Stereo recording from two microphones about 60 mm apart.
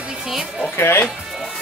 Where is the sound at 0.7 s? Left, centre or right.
Left.